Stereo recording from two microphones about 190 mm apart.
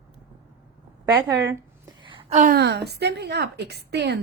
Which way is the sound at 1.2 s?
15° right (ahead or behind).